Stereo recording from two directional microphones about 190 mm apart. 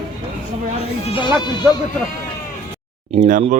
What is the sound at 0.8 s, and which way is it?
Sheep, 30° left (ahead or behind).